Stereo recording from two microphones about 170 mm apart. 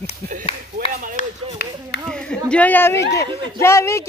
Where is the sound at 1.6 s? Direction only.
75° left (ahead or behind).